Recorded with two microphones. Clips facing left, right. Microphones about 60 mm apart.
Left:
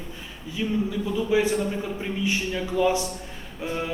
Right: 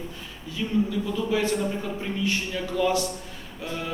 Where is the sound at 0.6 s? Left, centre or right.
Centre.